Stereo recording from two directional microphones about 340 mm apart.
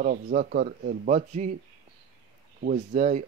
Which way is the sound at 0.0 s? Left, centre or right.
Right.